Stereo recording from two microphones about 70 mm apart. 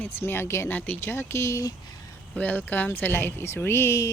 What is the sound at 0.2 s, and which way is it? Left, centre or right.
A woman's voice, left.